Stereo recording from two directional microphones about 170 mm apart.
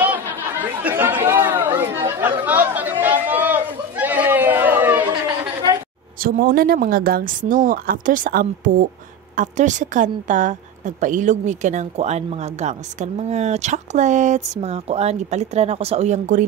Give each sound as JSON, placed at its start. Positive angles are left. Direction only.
{"t": 0.0, "sound": "chatter", "side_deg": -10}
{"t": 6.2, "sound": "a woman's voice", "side_deg": -60}